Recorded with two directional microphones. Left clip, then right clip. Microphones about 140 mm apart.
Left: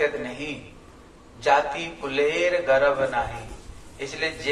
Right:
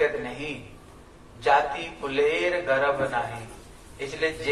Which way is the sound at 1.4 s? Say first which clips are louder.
Left 1 dB; 25° left (ahead or behind).